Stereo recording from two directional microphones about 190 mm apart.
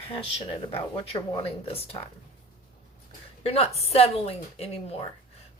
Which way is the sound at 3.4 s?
30° left (ahead or behind).